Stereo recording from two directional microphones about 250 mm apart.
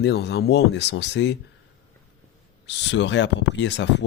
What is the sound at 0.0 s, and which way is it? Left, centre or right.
Speech, left.